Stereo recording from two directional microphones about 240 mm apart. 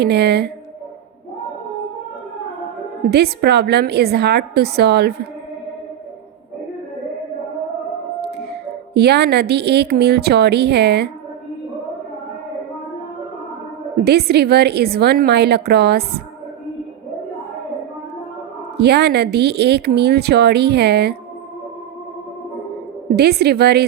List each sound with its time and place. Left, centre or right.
0.0 s speech: right
3.1 s speech: right
8.9 s speech: right
13.9 s speech: right
18.8 s speech: right
23.1 s speech: right